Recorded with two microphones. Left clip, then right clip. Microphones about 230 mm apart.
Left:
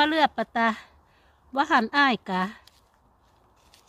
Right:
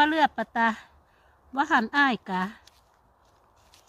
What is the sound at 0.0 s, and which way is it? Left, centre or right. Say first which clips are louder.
Speech: even; left.